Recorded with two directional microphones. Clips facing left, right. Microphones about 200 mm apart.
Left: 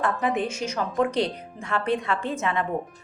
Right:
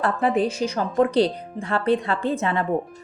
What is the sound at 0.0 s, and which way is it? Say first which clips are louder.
Speech: right 4 dB; 35° right (ahead or behind).